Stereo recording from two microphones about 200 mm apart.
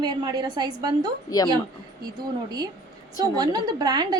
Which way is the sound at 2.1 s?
20° right (ahead or behind).